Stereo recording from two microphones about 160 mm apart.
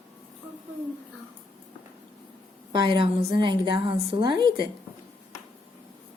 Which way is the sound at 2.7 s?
30° right (ahead or behind).